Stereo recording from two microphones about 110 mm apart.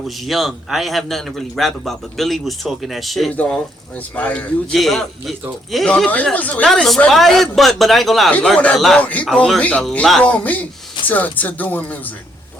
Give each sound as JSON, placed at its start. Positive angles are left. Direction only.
{"t": 0.3, "sound": "a man's voice", "side_deg": 0}
{"t": 3.3, "sound": "a man's voice", "side_deg": 15}
{"t": 6.7, "sound": "a man's voice", "side_deg": 0}
{"t": 8.3, "sound": "speech", "side_deg": 10}